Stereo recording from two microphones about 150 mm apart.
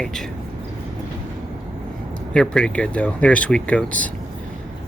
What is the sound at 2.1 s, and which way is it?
Speech, 5° left (ahead or behind).